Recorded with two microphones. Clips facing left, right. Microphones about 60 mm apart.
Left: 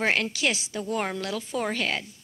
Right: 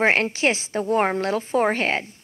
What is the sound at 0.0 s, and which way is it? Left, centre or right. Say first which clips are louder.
A woman's voice: right 6 dB; right.